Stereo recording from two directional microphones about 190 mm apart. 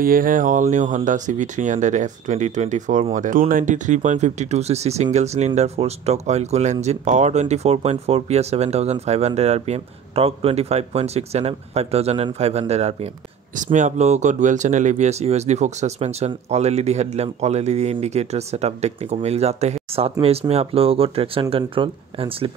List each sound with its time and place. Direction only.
0.0 s speech: 45° right (ahead or behind); by 22.5 s 30° right (ahead or behind)